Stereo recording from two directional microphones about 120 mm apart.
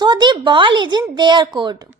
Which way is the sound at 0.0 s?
40° right (ahead or behind).